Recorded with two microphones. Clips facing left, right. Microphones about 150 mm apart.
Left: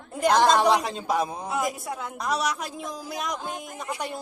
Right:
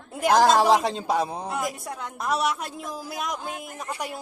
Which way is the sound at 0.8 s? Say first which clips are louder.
Right 2 dB; 30° right (ahead or behind).